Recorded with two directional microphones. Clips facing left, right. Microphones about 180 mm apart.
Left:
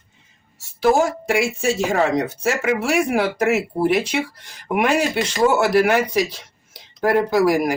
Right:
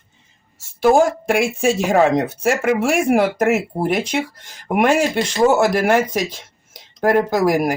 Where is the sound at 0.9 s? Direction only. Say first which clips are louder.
Right 3 dB; 55° right (ahead or behind).